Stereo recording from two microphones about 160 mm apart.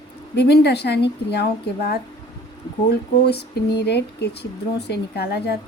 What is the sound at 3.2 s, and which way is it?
A woman's voice, 90° left.